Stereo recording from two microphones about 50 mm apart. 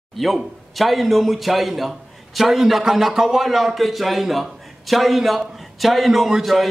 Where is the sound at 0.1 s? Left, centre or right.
Centre.